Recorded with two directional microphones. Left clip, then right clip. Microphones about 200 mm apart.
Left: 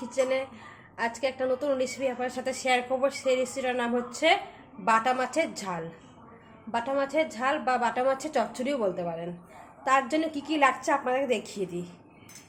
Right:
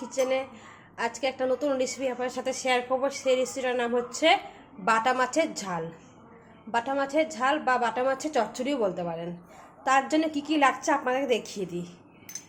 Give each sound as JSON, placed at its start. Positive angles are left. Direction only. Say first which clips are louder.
{"t": 0.1, "sound": "a woman's voice", "louder": "even", "side_deg": -5}